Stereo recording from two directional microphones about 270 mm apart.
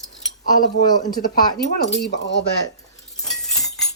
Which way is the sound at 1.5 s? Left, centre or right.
Left.